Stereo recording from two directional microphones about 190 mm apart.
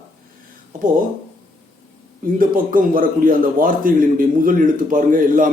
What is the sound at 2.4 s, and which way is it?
A man's voice, 50° right (ahead or behind).